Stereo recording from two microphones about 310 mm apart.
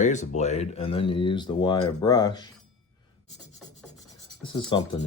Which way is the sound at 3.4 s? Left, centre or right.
Centre.